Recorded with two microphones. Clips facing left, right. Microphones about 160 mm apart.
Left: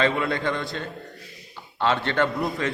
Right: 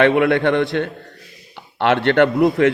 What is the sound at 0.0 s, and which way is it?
A man's voice, 65° right (ahead or behind).